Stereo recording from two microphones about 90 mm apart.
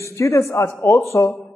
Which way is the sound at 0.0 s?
35° left (ahead or behind).